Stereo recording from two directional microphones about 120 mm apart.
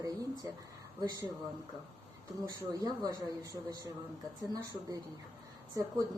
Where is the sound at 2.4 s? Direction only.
35° right (ahead or behind).